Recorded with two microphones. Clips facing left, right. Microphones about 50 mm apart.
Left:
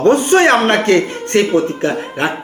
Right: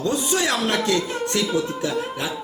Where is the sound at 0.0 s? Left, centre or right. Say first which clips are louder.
Left 12 dB; left.